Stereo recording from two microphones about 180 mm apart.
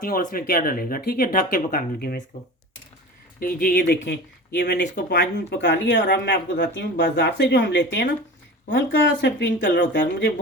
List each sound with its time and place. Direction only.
0.0 s speech: 50° left (ahead or behind)
3.4 s speech: 55° left (ahead or behind); by 10.3 s 80° left